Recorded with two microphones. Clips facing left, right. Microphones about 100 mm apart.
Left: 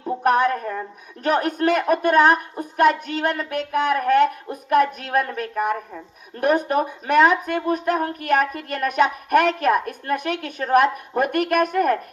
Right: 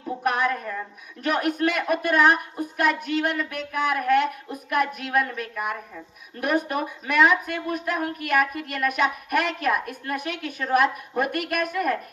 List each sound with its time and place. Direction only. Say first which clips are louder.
0.2 s a woman's voice: left 6 dB; 40° left (ahead or behind)